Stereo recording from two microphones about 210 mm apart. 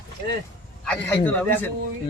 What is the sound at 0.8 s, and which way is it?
Speech, 5° left (ahead or behind).